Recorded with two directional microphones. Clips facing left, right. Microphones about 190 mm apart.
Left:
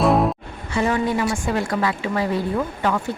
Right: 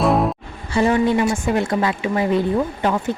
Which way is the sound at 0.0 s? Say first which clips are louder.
Even; centre (ahead or behind).